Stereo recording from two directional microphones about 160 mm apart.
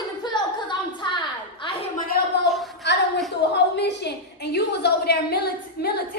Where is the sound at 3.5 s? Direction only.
90° left.